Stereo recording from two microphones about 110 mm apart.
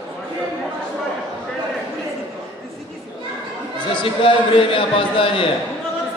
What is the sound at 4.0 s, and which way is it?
A man's voice, 50° left (ahead or behind).